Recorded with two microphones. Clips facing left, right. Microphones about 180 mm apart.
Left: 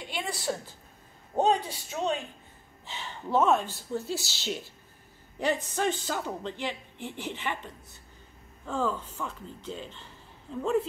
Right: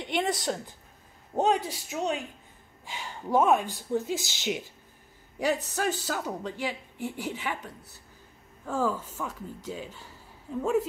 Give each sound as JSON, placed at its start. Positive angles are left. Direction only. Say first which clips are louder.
{"t": 0.0, "sound": "a woman's voice", "louder": "right 5 dB", "side_deg": -20}
{"t": 5.8, "sound": "speech", "louder": "even", "side_deg": -5}